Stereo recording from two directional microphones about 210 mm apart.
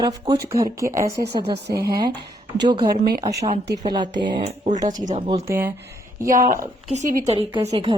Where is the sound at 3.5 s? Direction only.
50° right (ahead or behind).